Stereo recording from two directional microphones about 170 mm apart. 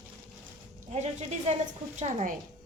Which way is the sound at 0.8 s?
40° right (ahead or behind).